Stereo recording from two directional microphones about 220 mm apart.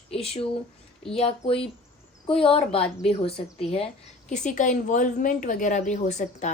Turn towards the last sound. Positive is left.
turn(degrees=30)  # may be behind; listen again after turning